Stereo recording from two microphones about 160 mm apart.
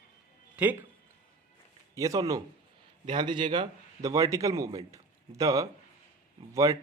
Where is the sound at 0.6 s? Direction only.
10° right (ahead or behind).